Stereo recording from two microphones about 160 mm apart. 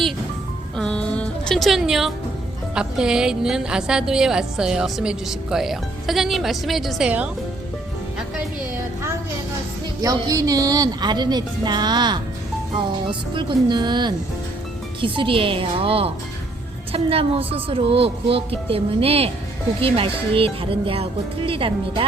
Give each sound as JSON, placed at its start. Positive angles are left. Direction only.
{"t": 0.8, "sound": "music", "side_deg": 5}
{"t": 2.7, "sound": "speech", "side_deg": -5}
{"t": 10.0, "sound": "a woman's voice", "side_deg": -20}